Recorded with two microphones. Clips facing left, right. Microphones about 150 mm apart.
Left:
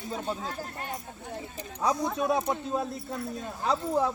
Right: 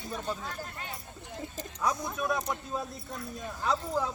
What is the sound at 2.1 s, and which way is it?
Speech, 30° left (ahead or behind).